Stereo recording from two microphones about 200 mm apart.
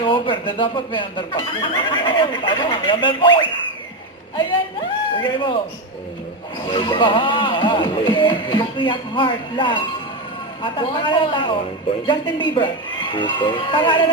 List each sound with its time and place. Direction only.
0.0 s speech: 25° left (ahead or behind)
5.1 s speech: 25° left (ahead or behind)
6.7 s speech: 25° left (ahead or behind)